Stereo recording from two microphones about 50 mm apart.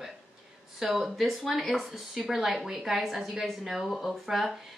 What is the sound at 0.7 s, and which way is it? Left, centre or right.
A woman's voice, centre.